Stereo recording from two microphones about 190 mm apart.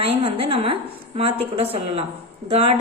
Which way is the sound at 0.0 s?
30° right (ahead or behind).